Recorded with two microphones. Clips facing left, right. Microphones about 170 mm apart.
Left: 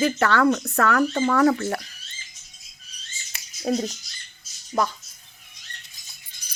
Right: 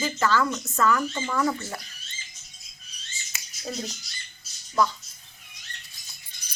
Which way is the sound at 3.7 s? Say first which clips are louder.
Left 10 dB; 60° left (ahead or behind).